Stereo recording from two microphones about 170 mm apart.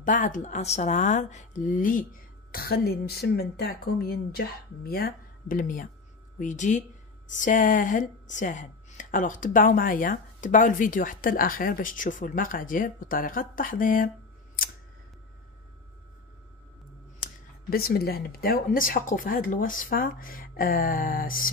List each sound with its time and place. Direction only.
0.0 s a woman's voice: 50° left (ahead or behind)
2.5 s a woman's voice: 65° left (ahead or behind)
17.6 s speech: 65° left (ahead or behind)